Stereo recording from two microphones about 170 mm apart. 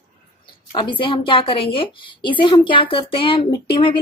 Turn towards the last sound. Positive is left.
turn(degrees=30)  # may be behind; listen again after turning